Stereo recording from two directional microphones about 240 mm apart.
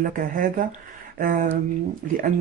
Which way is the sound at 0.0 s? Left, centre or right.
Right.